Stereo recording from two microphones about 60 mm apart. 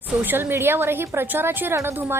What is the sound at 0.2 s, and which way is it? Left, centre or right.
A woman's voice, right.